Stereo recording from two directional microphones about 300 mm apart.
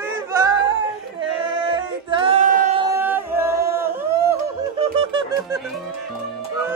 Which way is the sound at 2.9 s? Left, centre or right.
Centre.